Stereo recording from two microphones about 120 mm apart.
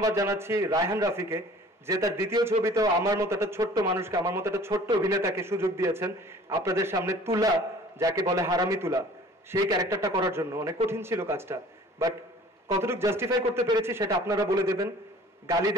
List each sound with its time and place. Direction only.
0.0 s a man's voice: 25° right (ahead or behind)